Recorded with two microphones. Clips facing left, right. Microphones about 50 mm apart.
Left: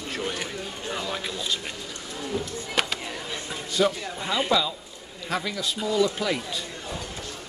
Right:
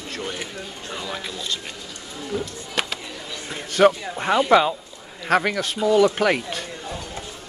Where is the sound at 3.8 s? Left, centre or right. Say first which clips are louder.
Right 8 dB; right.